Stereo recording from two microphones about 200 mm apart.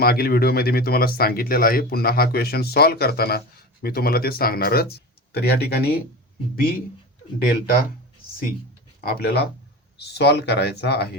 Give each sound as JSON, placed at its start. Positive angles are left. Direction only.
{"t": 0.0, "sound": "speech", "side_deg": 50}
{"t": 9.0, "sound": "speech", "side_deg": 50}